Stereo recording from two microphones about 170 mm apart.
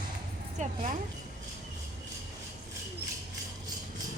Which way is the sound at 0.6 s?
45° right (ahead or behind).